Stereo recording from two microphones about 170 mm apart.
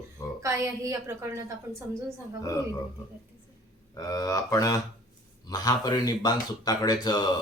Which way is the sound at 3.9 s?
20° left (ahead or behind).